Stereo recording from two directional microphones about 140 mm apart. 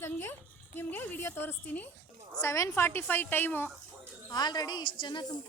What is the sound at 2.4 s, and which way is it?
A woman's voice, 20° left (ahead or behind).